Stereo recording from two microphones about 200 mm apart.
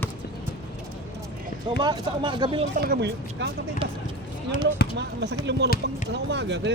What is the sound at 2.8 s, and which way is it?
Speech, 55° right (ahead or behind).